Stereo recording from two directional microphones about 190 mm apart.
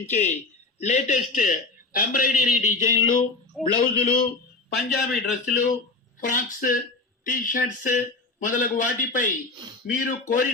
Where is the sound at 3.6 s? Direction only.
Centre (ahead or behind).